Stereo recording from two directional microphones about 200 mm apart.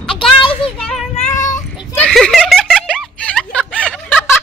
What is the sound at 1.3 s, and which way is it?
Child singing, 40° left (ahead or behind).